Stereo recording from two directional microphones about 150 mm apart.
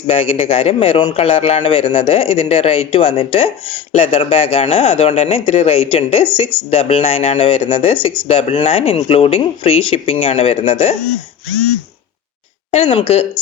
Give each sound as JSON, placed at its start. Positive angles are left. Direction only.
{"t": 0.1, "sound": "speech", "side_deg": 40}
{"t": 12.7, "sound": "speech", "side_deg": 40}